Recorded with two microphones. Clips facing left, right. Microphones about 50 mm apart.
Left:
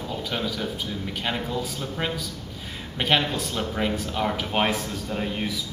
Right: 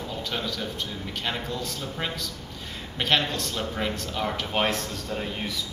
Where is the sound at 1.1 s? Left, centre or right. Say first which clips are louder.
Left 3 dB; centre.